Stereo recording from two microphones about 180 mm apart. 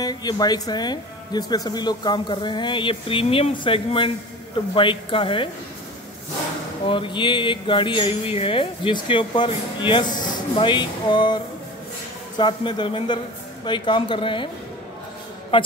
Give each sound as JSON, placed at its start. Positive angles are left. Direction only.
{"t": 0.0, "sound": "speech", "side_deg": 20}
{"t": 6.9, "sound": "speech", "side_deg": 25}
{"t": 15.5, "sound": "speech", "side_deg": 30}